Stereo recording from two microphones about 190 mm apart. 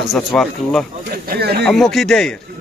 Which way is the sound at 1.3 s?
55° right (ahead or behind).